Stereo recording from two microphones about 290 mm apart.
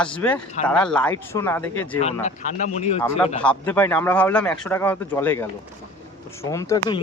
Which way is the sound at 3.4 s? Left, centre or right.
Centre.